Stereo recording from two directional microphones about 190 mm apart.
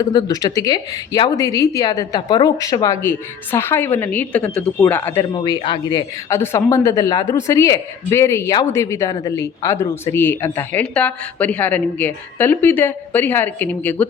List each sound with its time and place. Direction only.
0.0 s a woman's voice: 20° left (ahead or behind)
5.3 s a woman's voice: 25° left (ahead or behind); by 14.1 s 10° left (ahead or behind)